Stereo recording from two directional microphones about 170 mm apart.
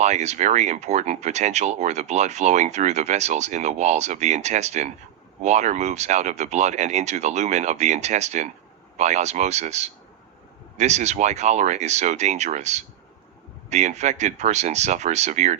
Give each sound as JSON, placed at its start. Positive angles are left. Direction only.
{"t": 0.0, "sound": "speech", "side_deg": -40}